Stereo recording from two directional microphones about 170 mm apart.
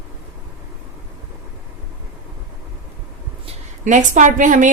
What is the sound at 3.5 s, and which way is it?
A woman's voice, 45° right (ahead or behind).